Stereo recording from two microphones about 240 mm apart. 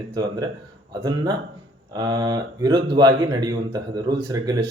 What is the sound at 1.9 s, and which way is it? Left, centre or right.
Speech, centre.